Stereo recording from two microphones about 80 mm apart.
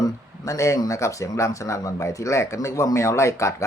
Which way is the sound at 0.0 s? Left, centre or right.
Left.